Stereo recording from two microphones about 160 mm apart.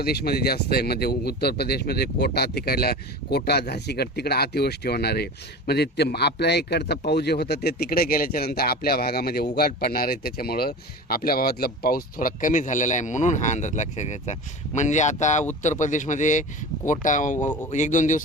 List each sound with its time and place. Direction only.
0.0 s speech: 80° left; by 18.2 s 50° left (ahead or behind)